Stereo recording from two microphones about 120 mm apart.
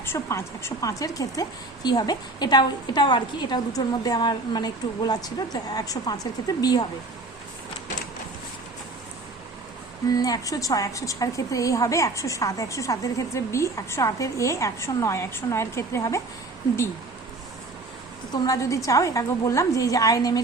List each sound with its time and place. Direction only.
0.0 s a woman's voice: 20° left (ahead or behind)
10.1 s a woman's voice: 30° left (ahead or behind)
18.4 s a woman's voice: 25° left (ahead or behind)